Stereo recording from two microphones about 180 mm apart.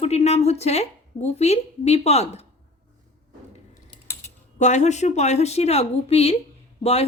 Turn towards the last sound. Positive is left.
turn(degrees=35)  # may be behind; listen again after turning